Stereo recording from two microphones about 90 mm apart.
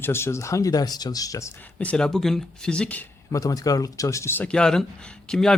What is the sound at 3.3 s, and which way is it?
Speech, 40° left (ahead or behind).